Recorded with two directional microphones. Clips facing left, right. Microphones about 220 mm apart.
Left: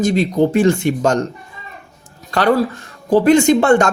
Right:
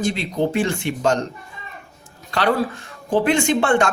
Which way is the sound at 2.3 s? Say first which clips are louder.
Left 5 dB; 45° left (ahead or behind).